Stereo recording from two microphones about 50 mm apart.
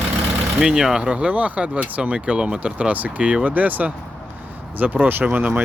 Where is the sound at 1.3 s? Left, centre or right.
Right.